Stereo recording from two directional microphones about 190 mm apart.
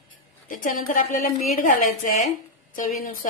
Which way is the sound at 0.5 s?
45° left (ahead or behind).